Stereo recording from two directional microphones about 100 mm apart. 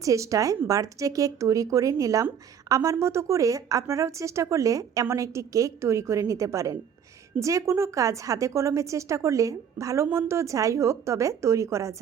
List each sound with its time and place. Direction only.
0.0 s a woman's voice: 35° right (ahead or behind)